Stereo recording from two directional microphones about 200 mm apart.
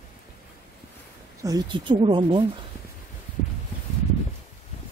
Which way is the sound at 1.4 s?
20° right (ahead or behind).